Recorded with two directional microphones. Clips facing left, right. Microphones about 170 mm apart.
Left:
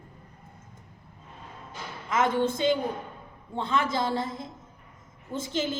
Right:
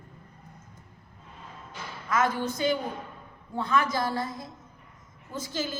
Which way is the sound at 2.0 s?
25° left (ahead or behind).